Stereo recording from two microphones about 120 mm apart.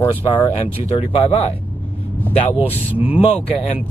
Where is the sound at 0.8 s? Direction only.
50° left (ahead or behind).